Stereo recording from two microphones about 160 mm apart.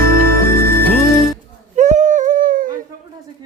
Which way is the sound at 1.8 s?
50° right (ahead or behind).